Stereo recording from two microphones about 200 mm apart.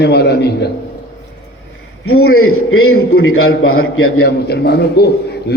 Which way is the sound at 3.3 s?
90° left.